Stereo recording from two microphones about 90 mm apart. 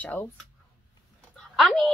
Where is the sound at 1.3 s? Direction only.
5° left (ahead or behind).